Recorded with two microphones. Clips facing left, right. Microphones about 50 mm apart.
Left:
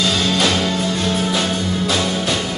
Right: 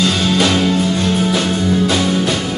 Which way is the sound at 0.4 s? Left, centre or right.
Centre.